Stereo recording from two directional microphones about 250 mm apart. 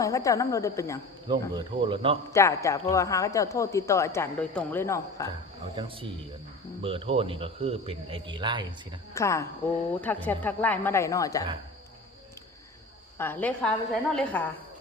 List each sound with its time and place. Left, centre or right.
0.0 s speech: centre
1.3 s a man's voice: centre
2.3 s speech: centre
6.8 s a man's voice: right
9.1 s speech: centre
13.1 s speech: centre